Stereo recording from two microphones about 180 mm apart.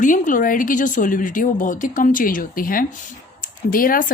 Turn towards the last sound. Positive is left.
turn(degrees=50)  # may be behind; listen again after turning